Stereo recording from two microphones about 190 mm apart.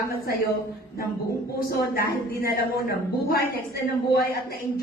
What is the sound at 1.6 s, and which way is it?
A woman's voice, 50° left (ahead or behind).